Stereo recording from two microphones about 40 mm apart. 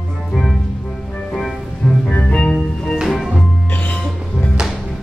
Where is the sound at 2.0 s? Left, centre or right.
Left.